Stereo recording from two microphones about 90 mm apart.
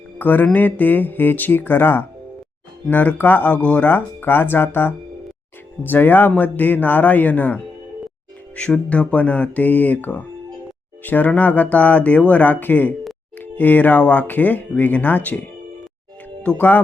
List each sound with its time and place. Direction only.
0.2 s speech: 20° left (ahead or behind)